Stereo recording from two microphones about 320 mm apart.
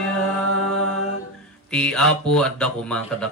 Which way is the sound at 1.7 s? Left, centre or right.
Centre.